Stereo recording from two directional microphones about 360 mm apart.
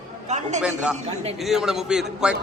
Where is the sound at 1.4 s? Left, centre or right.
Centre.